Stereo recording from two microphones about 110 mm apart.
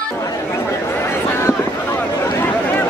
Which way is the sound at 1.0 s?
20° left (ahead or behind).